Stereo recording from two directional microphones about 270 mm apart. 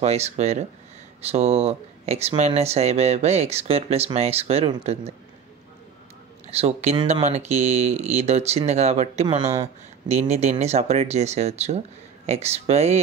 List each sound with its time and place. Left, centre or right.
0.0 s speech: right
6.4 s speech: right